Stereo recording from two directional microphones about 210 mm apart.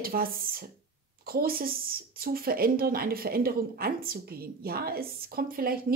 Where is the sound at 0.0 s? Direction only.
45° right (ahead or behind).